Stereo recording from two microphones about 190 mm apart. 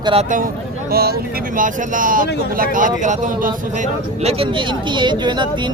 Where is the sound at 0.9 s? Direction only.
55° right (ahead or behind).